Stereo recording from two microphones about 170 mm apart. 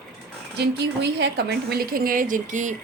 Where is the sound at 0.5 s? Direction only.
85° right; by 2.8 s 45° right (ahead or behind).